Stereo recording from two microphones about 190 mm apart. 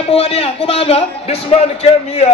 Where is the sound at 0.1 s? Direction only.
30° left (ahead or behind).